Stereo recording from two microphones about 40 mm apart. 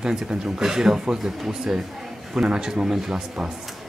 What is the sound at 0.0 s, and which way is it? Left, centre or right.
Speech, centre.